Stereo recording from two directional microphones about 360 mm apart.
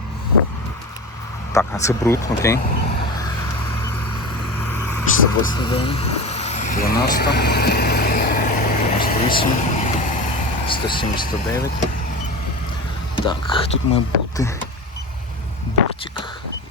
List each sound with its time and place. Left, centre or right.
1.5 s speech: centre
4.5 s vehicle: centre; by 9.1 s left
9.3 s speech: centre
13.1 s speech: centre